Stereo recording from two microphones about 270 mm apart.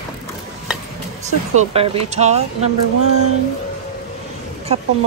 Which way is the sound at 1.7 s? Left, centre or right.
Right.